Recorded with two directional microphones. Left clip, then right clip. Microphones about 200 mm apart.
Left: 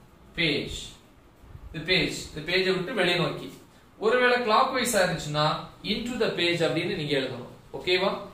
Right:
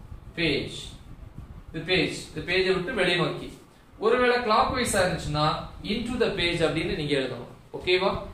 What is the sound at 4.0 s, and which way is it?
A man's voice, 10° right (ahead or behind).